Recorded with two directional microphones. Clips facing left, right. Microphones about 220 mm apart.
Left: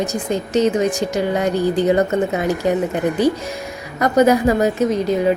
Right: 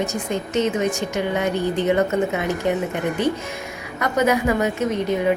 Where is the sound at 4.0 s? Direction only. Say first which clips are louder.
Left 6 dB; 35° left (ahead or behind).